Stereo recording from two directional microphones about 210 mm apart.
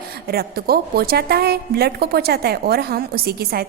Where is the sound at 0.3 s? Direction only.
45° right (ahead or behind).